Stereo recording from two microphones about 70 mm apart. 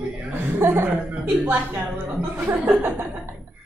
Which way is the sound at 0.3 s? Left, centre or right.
Right.